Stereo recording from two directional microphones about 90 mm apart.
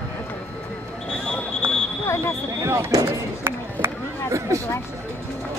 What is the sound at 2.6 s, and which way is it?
Speech, 30° right (ahead or behind).